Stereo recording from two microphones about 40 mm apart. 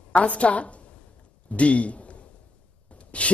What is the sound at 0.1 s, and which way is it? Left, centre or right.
A woman's voice, left.